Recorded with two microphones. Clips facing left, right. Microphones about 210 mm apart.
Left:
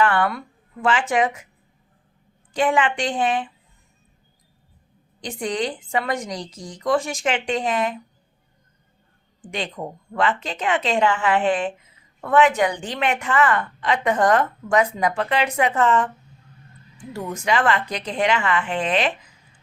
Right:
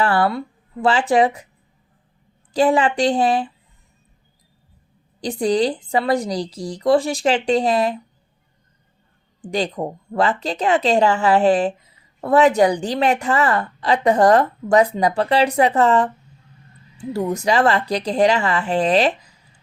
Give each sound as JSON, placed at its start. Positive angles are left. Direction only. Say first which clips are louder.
{"t": 0.0, "sound": "speech", "louder": "right 2 dB", "side_deg": -35}
{"t": 2.5, "sound": "speech", "louder": "right 4 dB", "side_deg": -35}
{"t": 5.2, "sound": "speech", "louder": "right 7 dB", "side_deg": -35}
{"t": 9.5, "sound": "speech", "louder": "right 7 dB", "side_deg": -40}
{"t": 17.1, "sound": "speech", "louder": "right 5 dB", "side_deg": -40}